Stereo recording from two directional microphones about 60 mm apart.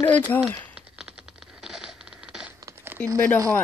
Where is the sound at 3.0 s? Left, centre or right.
Centre.